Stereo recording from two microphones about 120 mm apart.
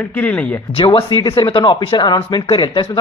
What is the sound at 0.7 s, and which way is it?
Speech, 45° left (ahead or behind).